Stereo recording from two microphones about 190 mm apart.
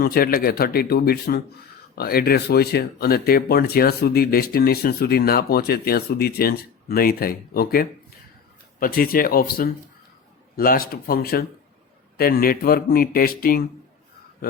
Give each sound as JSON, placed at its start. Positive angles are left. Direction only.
{"t": 0.0, "sound": "speech", "side_deg": 50}